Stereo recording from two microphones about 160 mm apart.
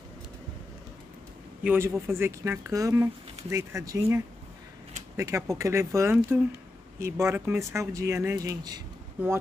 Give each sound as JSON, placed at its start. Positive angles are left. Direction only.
{"t": 1.6, "sound": "speech", "side_deg": -15}